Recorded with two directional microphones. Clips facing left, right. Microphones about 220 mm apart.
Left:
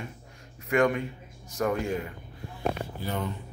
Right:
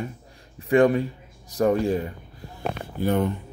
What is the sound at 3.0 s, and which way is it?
Speech, 55° right (ahead or behind).